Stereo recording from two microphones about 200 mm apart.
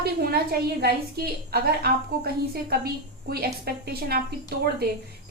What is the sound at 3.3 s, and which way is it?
Speech, 50° right (ahead or behind).